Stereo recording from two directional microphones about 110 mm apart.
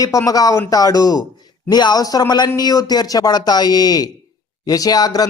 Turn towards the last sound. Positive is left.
turn(degrees=35)  # may be behind; listen again after turning